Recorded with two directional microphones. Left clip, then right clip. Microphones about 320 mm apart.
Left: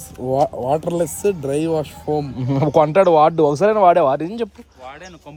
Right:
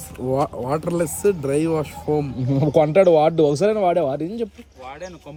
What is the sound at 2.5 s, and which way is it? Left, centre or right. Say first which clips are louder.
Speech: left 3 dB; left.